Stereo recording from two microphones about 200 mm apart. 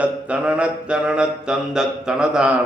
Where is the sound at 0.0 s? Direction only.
5° right (ahead or behind).